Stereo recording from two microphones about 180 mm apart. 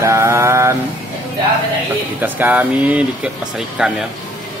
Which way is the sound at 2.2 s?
10° right (ahead or behind).